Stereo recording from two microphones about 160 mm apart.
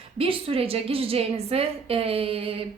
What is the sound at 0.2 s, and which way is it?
A woman's voice, 35° right (ahead or behind).